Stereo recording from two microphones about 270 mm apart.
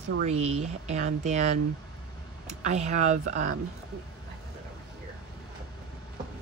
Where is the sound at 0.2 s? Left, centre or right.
Right.